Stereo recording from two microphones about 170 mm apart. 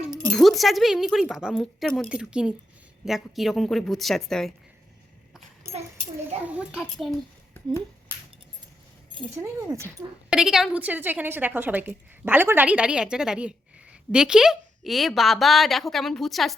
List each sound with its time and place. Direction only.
0.1 s speech: centre (ahead or behind)
6.4 s speech: 10° right (ahead or behind)
9.4 s a woman's voice: 15° right (ahead or behind)
10.2 s a woman's voice: 5° right (ahead or behind)